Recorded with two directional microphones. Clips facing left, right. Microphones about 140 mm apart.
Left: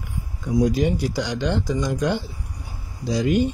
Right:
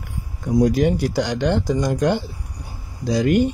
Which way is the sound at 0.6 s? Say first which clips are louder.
Right 3 dB; 60° right (ahead or behind).